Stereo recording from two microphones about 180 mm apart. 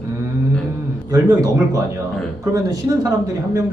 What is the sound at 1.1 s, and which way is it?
Speech, 20° right (ahead or behind).